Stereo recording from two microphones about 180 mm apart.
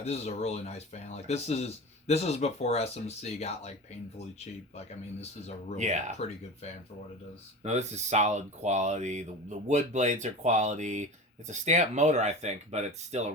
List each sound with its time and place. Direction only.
0.0 s speech: 35° left (ahead or behind)
5.2 s speech: 35° left (ahead or behind)
5.7 s speech: 40° right (ahead or behind)
6.1 s speech: 35° left (ahead or behind)
7.6 s speech: 40° right (ahead or behind)